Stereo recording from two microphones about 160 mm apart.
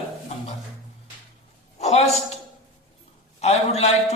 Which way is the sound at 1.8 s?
40° left (ahead or behind).